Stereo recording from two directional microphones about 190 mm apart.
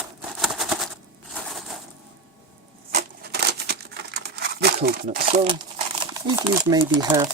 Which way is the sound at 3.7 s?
60° right (ahead or behind).